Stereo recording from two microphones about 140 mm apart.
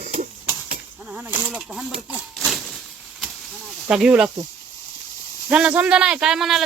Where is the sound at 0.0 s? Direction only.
70° right (ahead or behind).